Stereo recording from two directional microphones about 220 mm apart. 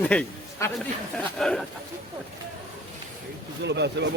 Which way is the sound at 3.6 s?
50° right (ahead or behind).